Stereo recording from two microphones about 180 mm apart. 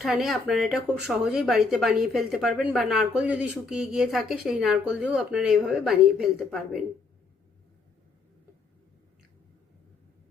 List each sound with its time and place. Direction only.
0.0 s speech: centre (ahead or behind)